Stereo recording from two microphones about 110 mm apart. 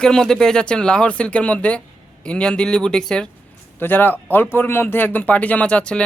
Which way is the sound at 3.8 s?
20° left (ahead or behind).